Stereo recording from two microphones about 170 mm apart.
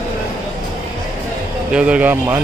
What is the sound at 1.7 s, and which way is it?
Speech, 5° right (ahead or behind).